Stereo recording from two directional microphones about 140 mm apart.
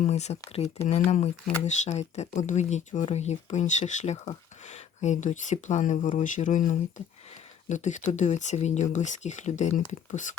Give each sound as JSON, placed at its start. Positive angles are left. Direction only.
{"t": 0.0, "sound": "speech", "side_deg": 50}